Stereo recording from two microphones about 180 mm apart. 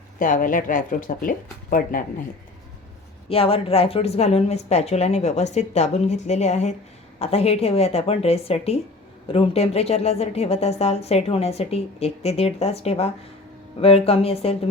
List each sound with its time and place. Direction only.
0.2 s speech: 50° left (ahead or behind)
3.2 s speech: 30° left (ahead or behind)